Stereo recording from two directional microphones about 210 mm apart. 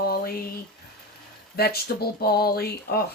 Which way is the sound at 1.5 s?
50° left (ahead or behind).